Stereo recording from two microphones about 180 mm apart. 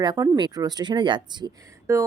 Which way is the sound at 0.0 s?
25° right (ahead or behind).